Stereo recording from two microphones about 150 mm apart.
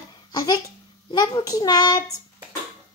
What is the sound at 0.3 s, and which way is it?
Babbling, 25° left (ahead or behind).